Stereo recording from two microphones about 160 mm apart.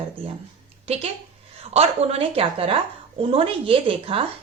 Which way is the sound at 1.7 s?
40° right (ahead or behind).